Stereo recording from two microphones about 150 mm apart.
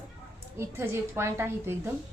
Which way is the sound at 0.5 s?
15° right (ahead or behind).